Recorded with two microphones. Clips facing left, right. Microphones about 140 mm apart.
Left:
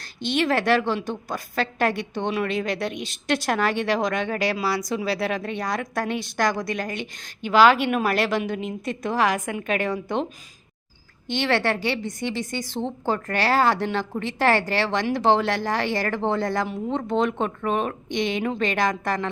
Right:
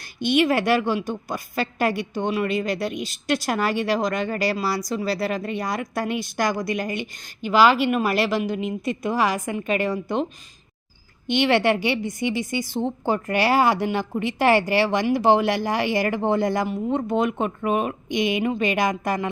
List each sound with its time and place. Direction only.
0.3 s a woman's voice: 10° right (ahead or behind)
11.3 s a woman's voice: 15° right (ahead or behind)